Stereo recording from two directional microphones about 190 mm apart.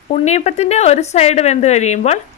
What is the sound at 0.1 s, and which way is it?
Speech, 35° left (ahead or behind).